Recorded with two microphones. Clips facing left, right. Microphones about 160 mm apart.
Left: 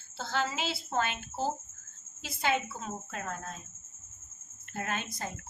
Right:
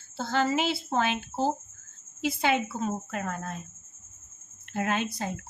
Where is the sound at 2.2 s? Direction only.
65° right (ahead or behind).